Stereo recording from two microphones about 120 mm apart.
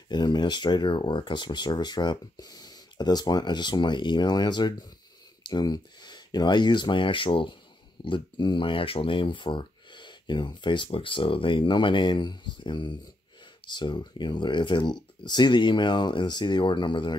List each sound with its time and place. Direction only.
0.1 s speech: 40° left (ahead or behind)